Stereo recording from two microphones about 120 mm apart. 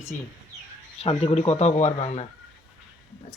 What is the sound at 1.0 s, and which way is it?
Speech, 55° left (ahead or behind).